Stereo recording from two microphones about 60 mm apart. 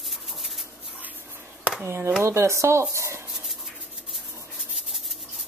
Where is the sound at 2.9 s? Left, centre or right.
Right.